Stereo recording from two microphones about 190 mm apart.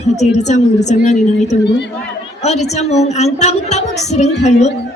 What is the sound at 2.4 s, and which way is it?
A woman's voice, 35° left (ahead or behind).